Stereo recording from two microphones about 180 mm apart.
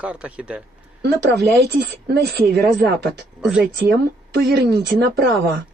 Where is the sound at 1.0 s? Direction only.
65° right (ahead or behind).